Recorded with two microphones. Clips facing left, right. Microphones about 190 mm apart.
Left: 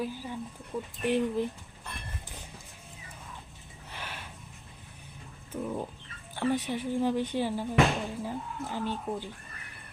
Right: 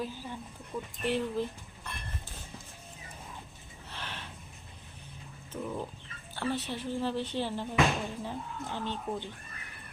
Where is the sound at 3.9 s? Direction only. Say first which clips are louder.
Left 1 dB; 10° left (ahead or behind).